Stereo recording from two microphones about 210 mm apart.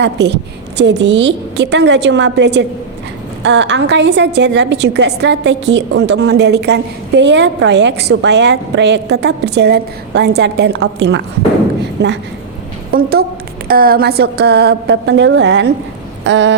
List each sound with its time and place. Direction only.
0.0 s a woman's voice: 55° right (ahead or behind)